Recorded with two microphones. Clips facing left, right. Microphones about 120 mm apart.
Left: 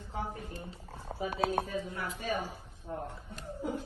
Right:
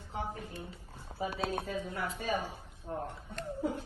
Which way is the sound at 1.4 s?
60° left (ahead or behind).